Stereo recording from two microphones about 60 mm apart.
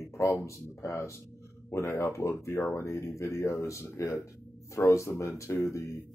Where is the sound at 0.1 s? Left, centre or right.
Left.